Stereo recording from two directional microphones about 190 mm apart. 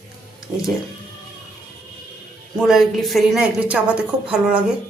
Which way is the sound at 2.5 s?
Centre (ahead or behind).